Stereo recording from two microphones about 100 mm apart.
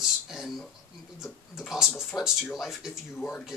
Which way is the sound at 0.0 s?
5° right (ahead or behind).